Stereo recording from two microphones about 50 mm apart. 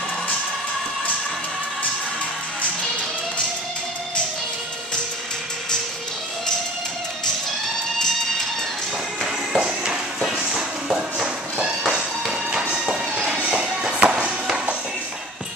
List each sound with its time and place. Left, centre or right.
9.5 s music: centre
12.3 s music: centre